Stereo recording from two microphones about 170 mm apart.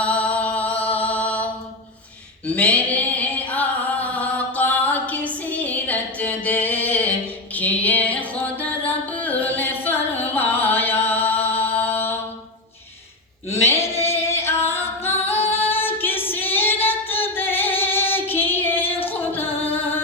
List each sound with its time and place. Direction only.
0.0 s music: 5° left (ahead or behind)
0.9 s mantra: 10° left (ahead or behind)
2.5 s a sound: 10° left (ahead or behind)
7.5 s singing: 10° left (ahead or behind)
13.5 s a sound: 15° left (ahead or behind)
14.3 s singing: 15° left (ahead or behind)
14.7 s a capella: 15° left (ahead or behind)
15.4 s female singing: 15° left (ahead or behind)
19.0 s music: 10° left (ahead or behind)
19.5 s singing: 35° left (ahead or behind)